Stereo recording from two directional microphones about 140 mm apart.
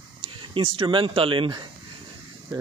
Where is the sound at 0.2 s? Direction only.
35° right (ahead or behind).